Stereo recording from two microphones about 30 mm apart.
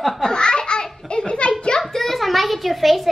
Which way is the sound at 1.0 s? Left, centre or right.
Left.